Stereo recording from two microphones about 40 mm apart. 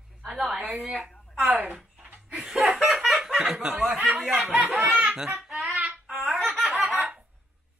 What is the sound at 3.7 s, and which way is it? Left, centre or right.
Speech, right.